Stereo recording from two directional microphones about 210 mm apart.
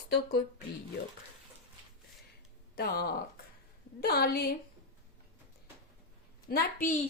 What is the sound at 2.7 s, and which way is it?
Speech, 50° left (ahead or behind).